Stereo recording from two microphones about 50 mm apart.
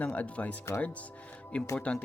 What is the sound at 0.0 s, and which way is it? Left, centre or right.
Speech, left.